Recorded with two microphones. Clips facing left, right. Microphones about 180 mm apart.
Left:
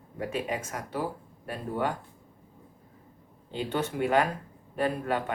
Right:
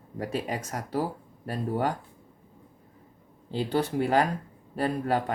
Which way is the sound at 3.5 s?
35° right (ahead or behind).